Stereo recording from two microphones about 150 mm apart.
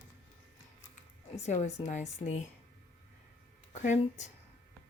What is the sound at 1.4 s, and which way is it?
A woman's voice, 50° left (ahead or behind).